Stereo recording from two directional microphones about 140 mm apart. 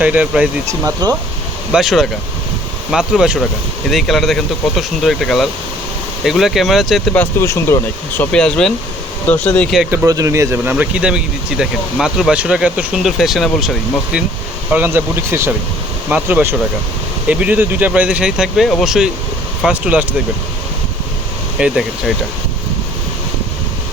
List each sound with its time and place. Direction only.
0.0 s speech: 10° right (ahead or behind)
0.7 s speech: 25° right (ahead or behind)
1.7 s speech: centre (ahead or behind)
7.1 s speech: 15° left (ahead or behind)
8.2 s speech: 5° left (ahead or behind)
10.1 s speech: 25° right (ahead or behind); by 14.2 s centre (ahead or behind)
14.7 s speech: 15° right (ahead or behind)
21.6 s speech: centre (ahead or behind)